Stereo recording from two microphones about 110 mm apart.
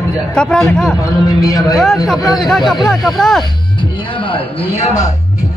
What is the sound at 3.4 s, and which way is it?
Music, 50° left (ahead or behind).